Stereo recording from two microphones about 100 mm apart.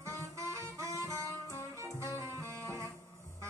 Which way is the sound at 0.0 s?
30° right (ahead or behind).